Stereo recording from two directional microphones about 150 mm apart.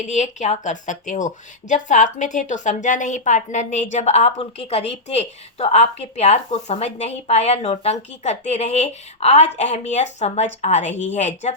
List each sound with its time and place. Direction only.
0.1 s speech: 55° left (ahead or behind)